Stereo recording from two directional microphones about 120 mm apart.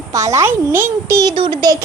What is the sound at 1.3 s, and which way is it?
Speech, 45° right (ahead or behind).